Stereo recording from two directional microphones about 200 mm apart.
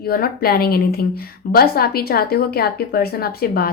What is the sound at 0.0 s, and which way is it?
A woman's voice, 50° left (ahead or behind).